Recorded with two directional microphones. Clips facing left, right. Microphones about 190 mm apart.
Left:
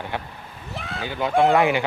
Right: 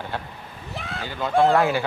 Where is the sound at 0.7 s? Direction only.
Centre (ahead or behind).